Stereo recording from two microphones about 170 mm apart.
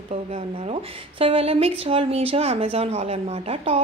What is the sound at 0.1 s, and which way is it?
Speech, 35° right (ahead or behind).